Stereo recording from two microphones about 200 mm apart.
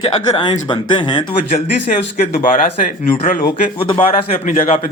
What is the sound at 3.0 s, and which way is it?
A man's voice, 40° left (ahead or behind).